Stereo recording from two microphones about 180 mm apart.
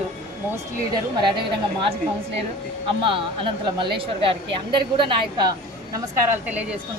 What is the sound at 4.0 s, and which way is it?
A woman's voice, 30° right (ahead or behind).